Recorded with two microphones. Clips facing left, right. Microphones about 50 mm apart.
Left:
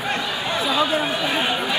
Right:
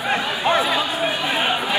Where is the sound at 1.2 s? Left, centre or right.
Centre.